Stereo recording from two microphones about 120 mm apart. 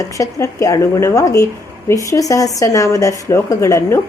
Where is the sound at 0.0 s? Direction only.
25° left (ahead or behind).